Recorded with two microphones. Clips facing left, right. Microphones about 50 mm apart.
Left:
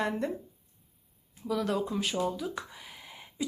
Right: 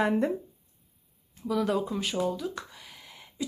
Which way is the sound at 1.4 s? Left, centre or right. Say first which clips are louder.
Right 3 dB; centre.